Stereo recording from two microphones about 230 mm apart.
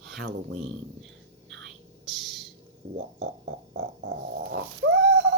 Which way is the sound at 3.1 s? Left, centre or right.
Right.